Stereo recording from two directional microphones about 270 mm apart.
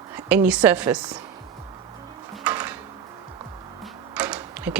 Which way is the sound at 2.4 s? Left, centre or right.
Centre.